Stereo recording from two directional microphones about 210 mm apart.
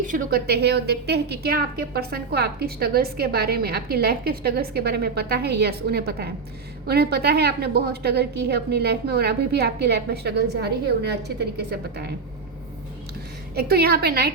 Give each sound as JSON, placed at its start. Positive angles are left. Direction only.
{"t": 0.1, "sound": "a woman's voice", "side_deg": -45}
{"t": 13.6, "sound": "a woman's voice", "side_deg": -50}